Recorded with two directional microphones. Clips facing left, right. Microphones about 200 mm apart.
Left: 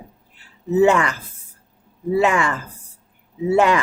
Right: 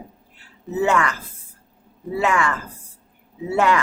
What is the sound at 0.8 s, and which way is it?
Speech, 20° left (ahead or behind).